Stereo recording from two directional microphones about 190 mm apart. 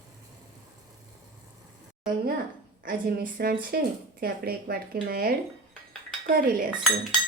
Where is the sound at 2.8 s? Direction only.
45° right (ahead or behind).